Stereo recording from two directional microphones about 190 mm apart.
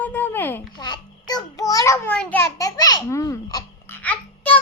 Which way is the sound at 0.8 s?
20° left (ahead or behind).